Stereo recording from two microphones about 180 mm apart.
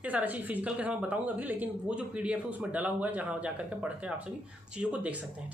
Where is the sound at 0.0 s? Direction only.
10° right (ahead or behind).